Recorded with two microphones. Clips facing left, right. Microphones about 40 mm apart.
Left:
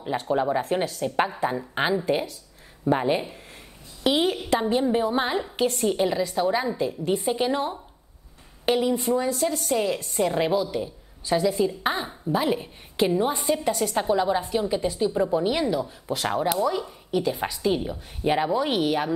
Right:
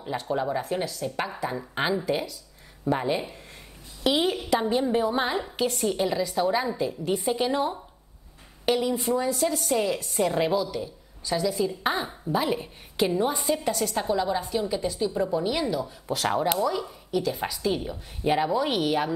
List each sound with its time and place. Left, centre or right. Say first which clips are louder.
0.0 s speech: left 3 dB; centre
0.6 s speech: left 4 dB; left
1.8 s a woman's voice: left 2 dB; centre
4.0 s a woman's voice: left 1 dB; centre
11.8 s a woman's voice: left 1 dB; centre
16.2 s a woman's voice: even; centre